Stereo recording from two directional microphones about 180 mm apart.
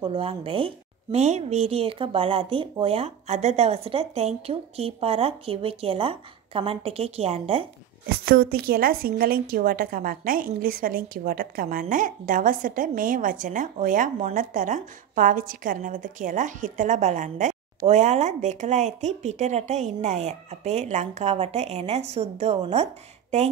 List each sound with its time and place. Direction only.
0.0 s speech: 30° right (ahead or behind)
8.3 s a woman's voice: 60° right (ahead or behind); by 22.8 s 35° right (ahead or behind)